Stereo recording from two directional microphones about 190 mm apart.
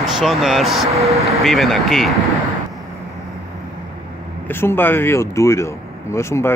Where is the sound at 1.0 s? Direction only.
35° right (ahead or behind).